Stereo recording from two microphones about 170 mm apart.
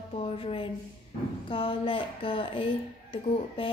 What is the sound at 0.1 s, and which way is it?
Speech, 35° left (ahead or behind).